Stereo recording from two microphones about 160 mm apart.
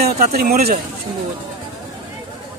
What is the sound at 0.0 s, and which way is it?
Speech, 75° right (ahead or behind).